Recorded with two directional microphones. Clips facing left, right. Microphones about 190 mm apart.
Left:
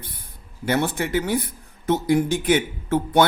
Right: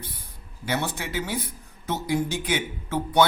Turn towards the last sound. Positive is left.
turn(degrees=50)  # may be behind; listen again after turning